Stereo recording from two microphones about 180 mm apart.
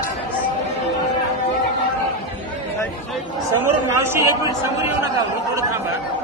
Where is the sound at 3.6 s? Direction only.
15° right (ahead or behind).